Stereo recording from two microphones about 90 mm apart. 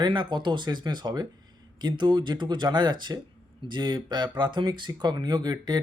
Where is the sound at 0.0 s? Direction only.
60° right (ahead or behind).